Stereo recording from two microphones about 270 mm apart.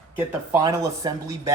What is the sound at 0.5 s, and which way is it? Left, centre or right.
Speech, centre.